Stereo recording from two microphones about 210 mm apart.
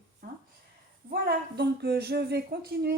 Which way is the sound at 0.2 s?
45° right (ahead or behind).